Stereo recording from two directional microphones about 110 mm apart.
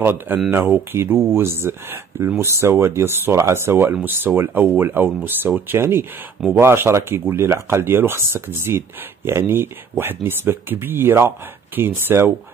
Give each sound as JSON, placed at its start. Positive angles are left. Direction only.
{"t": 0.0, "sound": "speech", "side_deg": -20}